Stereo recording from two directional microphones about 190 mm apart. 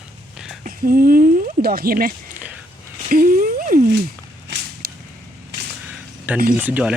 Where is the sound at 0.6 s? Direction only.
45° right (ahead or behind).